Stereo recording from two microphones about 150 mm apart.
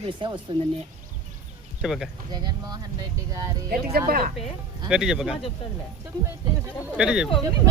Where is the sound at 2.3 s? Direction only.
25° right (ahead or behind).